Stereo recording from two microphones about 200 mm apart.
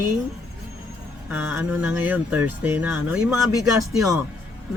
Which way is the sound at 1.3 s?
10° right (ahead or behind).